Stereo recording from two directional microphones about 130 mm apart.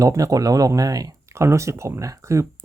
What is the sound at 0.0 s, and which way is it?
Speech, 25° right (ahead or behind).